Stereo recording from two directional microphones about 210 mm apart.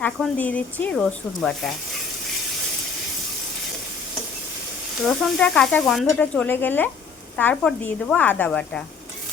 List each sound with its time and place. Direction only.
0.0 s speech: 5° left (ahead or behind)
5.0 s speech: 5° left (ahead or behind)